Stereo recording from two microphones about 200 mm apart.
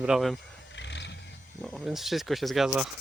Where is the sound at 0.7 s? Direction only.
60° left (ahead or behind).